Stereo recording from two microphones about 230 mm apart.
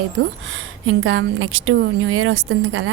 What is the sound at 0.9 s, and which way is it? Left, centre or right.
Speech, right.